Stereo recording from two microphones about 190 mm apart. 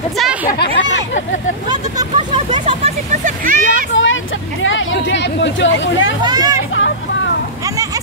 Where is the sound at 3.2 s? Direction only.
45° right (ahead or behind).